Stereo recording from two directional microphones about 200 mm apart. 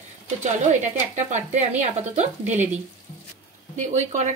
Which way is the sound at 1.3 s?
35° right (ahead or behind).